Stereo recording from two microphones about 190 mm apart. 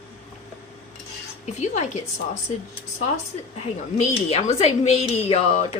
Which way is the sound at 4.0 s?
35° left (ahead or behind).